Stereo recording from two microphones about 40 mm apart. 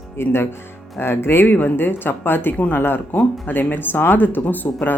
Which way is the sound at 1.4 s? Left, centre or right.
Left.